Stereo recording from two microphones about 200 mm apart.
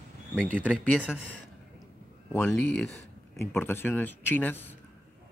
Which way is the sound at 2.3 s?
5° left (ahead or behind).